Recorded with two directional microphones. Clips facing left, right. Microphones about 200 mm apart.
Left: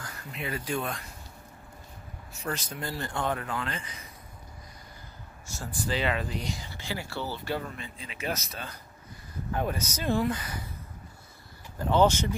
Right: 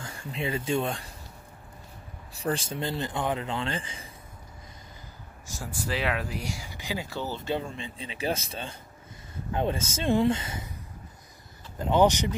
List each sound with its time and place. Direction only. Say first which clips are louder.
0.0 s speech: right 5 dB; 30° right (ahead or behind)
2.3 s speech: right 5 dB; 30° right (ahead or behind)
5.6 s speech: left 1 dB; 5° right (ahead or behind); by 10.7 s 25° right (ahead or behind)
11.8 s speech: right 1 dB; 15° right (ahead or behind)